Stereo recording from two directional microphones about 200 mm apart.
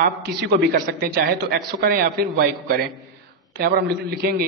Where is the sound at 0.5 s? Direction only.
50° right (ahead or behind).